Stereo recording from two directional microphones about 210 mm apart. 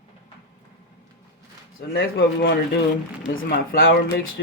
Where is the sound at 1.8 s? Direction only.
45° left (ahead or behind).